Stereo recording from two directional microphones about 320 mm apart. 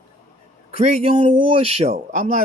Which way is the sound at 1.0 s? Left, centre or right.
Centre.